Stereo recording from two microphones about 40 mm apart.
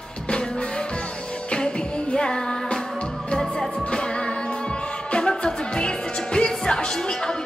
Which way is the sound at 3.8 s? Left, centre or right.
Left.